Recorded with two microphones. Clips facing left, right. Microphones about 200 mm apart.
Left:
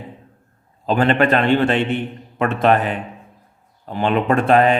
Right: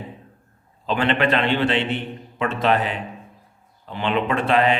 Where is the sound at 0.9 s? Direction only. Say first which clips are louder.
Left 4 dB; 45° left (ahead or behind).